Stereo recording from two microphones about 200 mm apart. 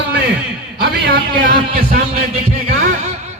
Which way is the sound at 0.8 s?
55° right (ahead or behind).